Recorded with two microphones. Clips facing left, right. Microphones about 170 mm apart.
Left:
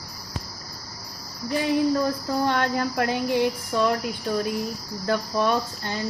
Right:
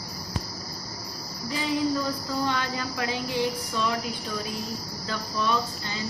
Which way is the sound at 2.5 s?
55° left (ahead or behind).